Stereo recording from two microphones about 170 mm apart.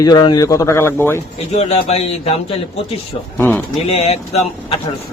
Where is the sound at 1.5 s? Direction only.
35° left (ahead or behind).